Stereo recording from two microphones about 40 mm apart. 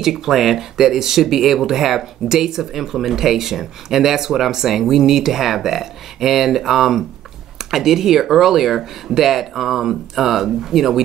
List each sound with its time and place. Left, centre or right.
0.0 s speech: centre